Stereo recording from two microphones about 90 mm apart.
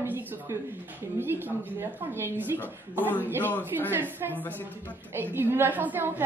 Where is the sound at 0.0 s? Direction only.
20° right (ahead or behind).